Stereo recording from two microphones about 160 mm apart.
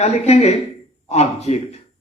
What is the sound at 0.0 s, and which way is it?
A man's voice, 40° left (ahead or behind).